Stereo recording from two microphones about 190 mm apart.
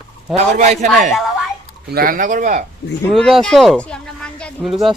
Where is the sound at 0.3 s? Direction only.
35° right (ahead or behind).